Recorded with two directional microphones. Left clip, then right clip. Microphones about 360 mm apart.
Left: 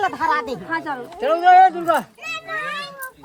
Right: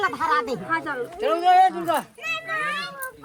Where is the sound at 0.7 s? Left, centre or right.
Left.